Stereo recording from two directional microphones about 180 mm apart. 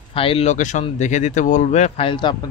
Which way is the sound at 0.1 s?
30° left (ahead or behind).